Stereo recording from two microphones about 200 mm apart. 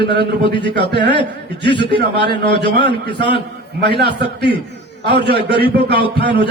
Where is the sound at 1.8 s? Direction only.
55° right (ahead or behind).